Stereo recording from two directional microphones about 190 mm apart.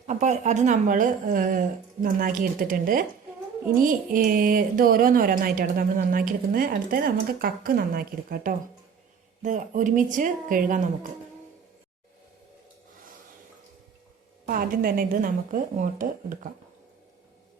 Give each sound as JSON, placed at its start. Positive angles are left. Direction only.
{"t": 0.1, "sound": "speech", "side_deg": -40}
{"t": 9.4, "sound": "speech", "side_deg": -40}
{"t": 14.4, "sound": "speech", "side_deg": -50}